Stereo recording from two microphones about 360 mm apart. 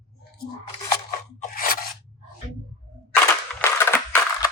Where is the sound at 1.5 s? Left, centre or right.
Left.